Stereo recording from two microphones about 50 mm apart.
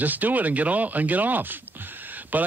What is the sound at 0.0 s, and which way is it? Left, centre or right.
Speech, right.